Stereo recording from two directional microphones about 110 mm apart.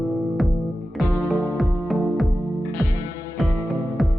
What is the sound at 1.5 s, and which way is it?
Music, centre (ahead or behind).